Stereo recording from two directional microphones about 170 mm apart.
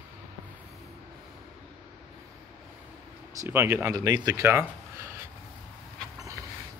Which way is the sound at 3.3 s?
15° right (ahead or behind).